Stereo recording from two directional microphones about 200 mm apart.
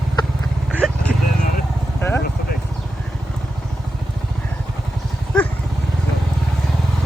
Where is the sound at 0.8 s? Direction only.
5° left (ahead or behind).